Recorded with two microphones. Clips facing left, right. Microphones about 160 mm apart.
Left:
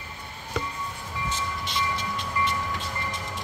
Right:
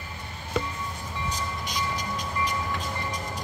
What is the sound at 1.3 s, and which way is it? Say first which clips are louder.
Train: left 3 dB; 40° right (ahead or behind).